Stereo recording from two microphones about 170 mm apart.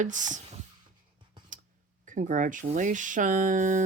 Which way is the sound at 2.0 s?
50° right (ahead or behind).